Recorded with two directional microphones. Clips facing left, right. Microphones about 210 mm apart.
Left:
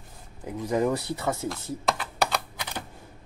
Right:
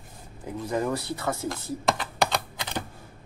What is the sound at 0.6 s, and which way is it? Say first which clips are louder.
Speech: left 3 dB; 15° left (ahead or behind).